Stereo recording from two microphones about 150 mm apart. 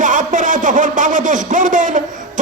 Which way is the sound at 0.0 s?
55° right (ahead or behind).